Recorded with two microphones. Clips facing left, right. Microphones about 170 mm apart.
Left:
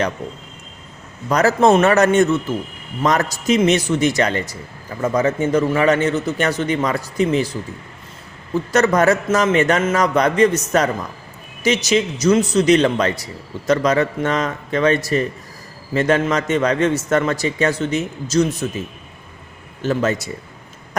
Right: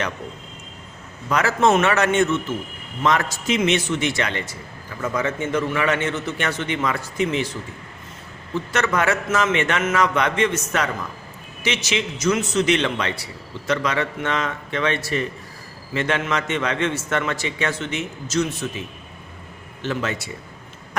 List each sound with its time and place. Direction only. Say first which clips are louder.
1.3 s a man's voice: left 4 dB; 40° left (ahead or behind)
8.5 s a man's voice: left 6 dB; 40° left (ahead or behind)
19.8 s a man's voice: left 6 dB; 40° left (ahead or behind)